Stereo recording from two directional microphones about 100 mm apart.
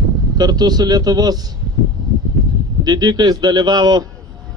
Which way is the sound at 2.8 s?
45° right (ahead or behind).